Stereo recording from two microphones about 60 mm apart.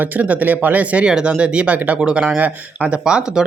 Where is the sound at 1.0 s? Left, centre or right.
Centre.